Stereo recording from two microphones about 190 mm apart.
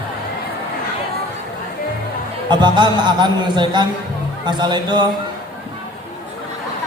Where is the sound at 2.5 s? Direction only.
25° right (ahead or behind).